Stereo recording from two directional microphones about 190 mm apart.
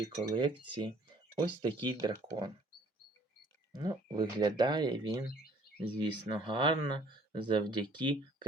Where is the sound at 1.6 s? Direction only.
25° right (ahead or behind).